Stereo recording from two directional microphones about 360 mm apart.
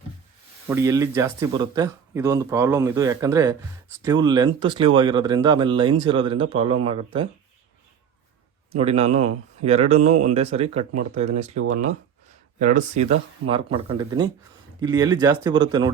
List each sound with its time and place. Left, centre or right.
0.7 s speech: centre
8.7 s speech: centre